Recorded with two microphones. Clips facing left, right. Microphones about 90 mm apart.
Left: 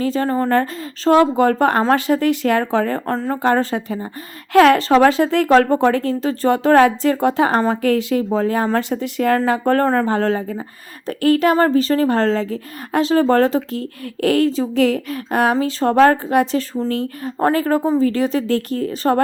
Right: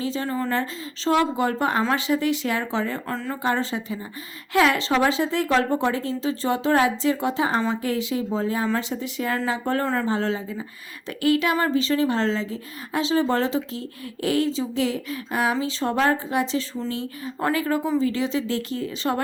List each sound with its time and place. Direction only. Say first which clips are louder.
0.0 s a woman's voice: left 7 dB; 50° left (ahead or behind)
16.7 s a woman's voice: left 8 dB; 45° left (ahead or behind)